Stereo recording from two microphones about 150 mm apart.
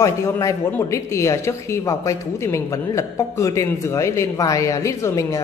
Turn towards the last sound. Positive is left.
turn(degrees=20)  # may be behind; listen again after turning